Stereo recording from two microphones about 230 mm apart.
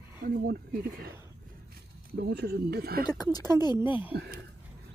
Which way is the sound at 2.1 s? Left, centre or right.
Right.